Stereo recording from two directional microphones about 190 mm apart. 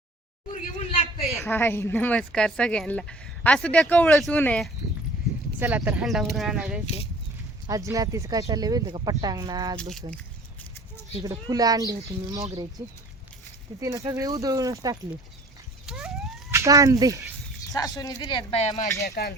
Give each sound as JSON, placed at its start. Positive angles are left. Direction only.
{"t": 0.5, "sound": "a sound", "side_deg": 30}
{"t": 1.3, "sound": "speech", "side_deg": 10}
{"t": 5.5, "sound": "speech", "side_deg": -10}
{"t": 7.7, "sound": "speech", "side_deg": -15}
{"t": 11.3, "sound": "speech", "side_deg": -20}
{"t": 15.9, "sound": "emergency vehicle", "side_deg": 0}
{"t": 16.5, "sound": "speech", "side_deg": -15}
{"t": 17.8, "sound": "speech", "side_deg": 15}
{"t": 19.0, "sound": "speech", "side_deg": 55}